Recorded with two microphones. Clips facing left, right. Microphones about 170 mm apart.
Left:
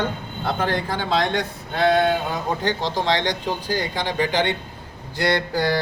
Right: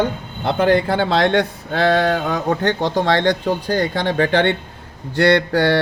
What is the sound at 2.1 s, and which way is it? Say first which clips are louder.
A man's voice: right 5 dB; 70° right (ahead or behind).